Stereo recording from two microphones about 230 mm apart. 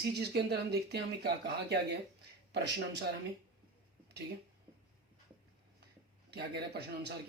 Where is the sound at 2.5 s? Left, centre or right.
Right.